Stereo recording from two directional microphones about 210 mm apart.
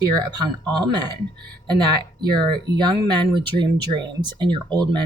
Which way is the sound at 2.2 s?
20° right (ahead or behind).